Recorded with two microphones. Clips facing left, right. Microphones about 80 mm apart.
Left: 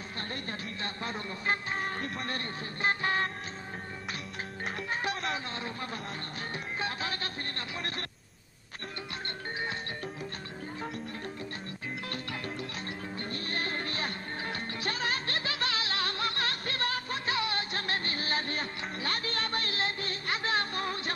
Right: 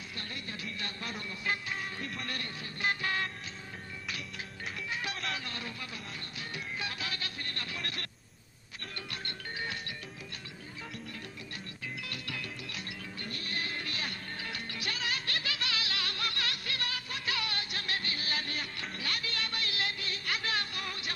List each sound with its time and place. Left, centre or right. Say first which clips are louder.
0.3 s speech: left 2 dB; left
4.8 s a sound: left 4 dB; left
6.8 s a man's voice: left 6 dB; left
12.1 s music: left 4 dB; left